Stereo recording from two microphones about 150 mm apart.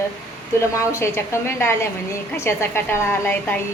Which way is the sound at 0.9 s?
20° left (ahead or behind).